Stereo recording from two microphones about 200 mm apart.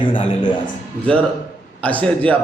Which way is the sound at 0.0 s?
25° left (ahead or behind).